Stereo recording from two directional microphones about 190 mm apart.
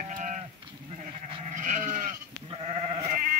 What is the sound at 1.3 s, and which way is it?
Livestock, 40° right (ahead or behind).